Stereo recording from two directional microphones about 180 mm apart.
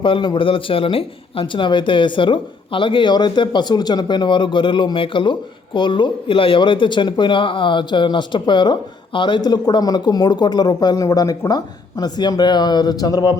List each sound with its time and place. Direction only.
0.0 s a man's voice: 25° left (ahead or behind)